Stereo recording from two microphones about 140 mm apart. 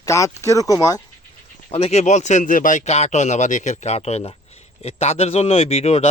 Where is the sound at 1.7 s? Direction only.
50° left (ahead or behind).